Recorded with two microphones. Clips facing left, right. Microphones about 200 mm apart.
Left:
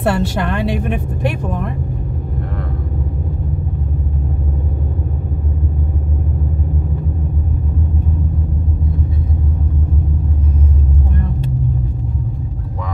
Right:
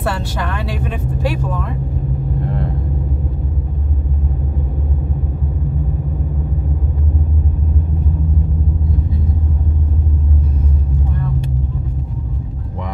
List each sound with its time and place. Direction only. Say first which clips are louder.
0.0 s a woman's voice: left 5 dB; 60° left (ahead or behind)